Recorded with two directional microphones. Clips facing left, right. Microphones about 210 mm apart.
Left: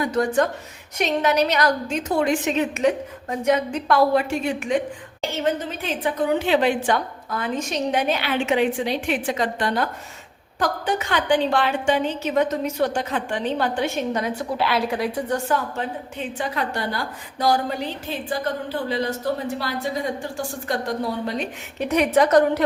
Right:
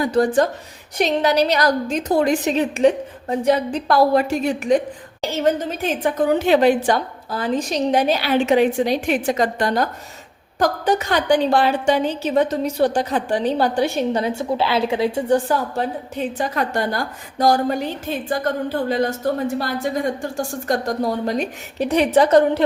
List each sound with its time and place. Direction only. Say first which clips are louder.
0.0 s a woman's voice: right 4 dB; 35° right (ahead or behind)
5.8 s a woman's voice: right 4 dB; 45° right (ahead or behind); by 22.6 s 25° right (ahead or behind)